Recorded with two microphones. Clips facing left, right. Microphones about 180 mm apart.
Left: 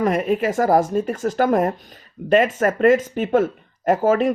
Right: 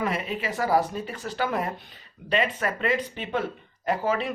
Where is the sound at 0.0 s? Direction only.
45° left (ahead or behind).